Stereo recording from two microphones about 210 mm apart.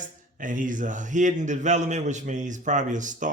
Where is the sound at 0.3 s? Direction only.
40° right (ahead or behind).